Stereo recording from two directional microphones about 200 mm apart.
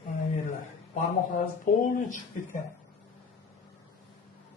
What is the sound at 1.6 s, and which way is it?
Speech, 40° left (ahead or behind).